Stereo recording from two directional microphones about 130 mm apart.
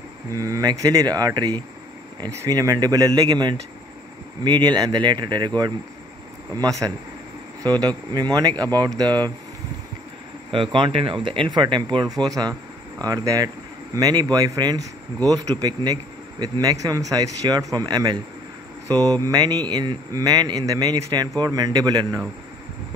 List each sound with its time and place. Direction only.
0.3 s speech: 25° right (ahead or behind)
6.5 s speech: 25° right (ahead or behind)
10.5 s speech: 40° right (ahead or behind)